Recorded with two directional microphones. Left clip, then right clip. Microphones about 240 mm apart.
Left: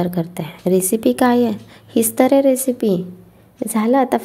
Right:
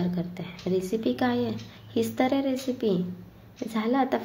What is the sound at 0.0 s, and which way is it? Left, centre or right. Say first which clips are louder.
A woman's voice: left 11 dB; left.